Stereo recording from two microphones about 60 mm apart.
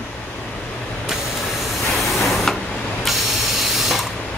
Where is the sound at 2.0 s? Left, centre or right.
Centre.